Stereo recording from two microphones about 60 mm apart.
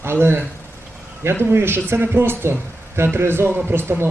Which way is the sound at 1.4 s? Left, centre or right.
Right.